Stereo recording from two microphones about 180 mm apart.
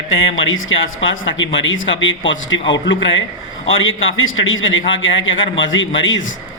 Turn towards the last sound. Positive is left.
turn(degrees=90)